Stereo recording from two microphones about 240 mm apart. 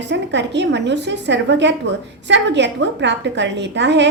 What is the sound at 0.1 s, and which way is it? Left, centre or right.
A woman's voice, right.